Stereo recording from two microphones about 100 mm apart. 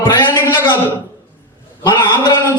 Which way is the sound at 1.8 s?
45° left (ahead or behind).